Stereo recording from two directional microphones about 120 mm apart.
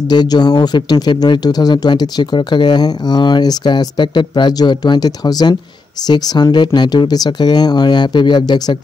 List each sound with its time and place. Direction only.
0.1 s speech: 35° left (ahead or behind)